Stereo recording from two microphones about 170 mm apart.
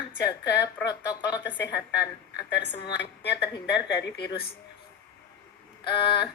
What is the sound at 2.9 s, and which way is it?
Speech, 85° left.